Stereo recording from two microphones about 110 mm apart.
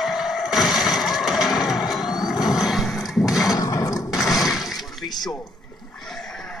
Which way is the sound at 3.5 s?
30° left (ahead or behind).